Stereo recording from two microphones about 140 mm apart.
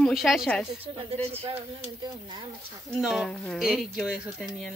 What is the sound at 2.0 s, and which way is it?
Speech, 30° right (ahead or behind).